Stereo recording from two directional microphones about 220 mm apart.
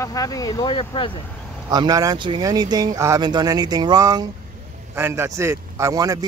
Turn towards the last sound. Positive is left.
turn(degrees=-15)  # may be behind; listen again after turning